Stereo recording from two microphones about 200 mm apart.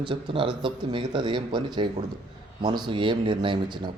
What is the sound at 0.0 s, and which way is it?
Speech, 25° right (ahead or behind).